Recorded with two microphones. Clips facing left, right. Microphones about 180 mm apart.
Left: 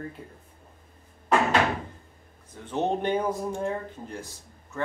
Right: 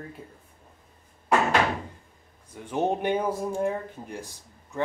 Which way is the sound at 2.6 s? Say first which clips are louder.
Right 1 dB; 10° right (ahead or behind).